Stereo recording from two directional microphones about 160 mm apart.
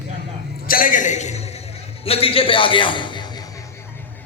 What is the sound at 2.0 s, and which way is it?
A man's voice, 35° left (ahead or behind).